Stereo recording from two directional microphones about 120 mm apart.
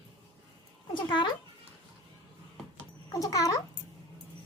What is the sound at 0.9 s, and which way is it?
Speech, 40° left (ahead or behind).